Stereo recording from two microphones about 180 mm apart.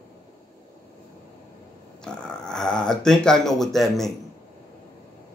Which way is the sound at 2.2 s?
5° left (ahead or behind).